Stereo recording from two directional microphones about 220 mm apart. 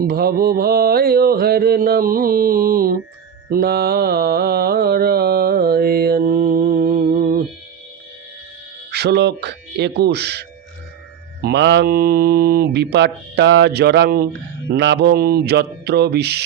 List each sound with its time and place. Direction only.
0.0 s mantra: 45° right (ahead or behind)
8.9 s speech: 50° right (ahead or behind)
11.4 s mantra: 50° right (ahead or behind)